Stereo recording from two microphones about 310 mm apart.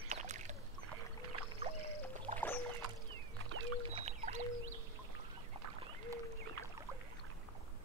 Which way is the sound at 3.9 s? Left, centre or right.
Right.